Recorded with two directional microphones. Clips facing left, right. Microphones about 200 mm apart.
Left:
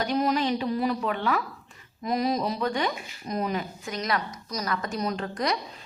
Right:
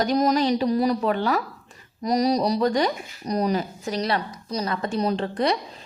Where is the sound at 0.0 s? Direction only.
40° right (ahead or behind).